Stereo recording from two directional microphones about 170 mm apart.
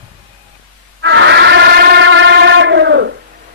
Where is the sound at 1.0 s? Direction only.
90° right.